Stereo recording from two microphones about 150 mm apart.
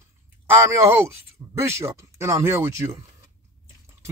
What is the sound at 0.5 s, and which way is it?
Speech, 15° right (ahead or behind).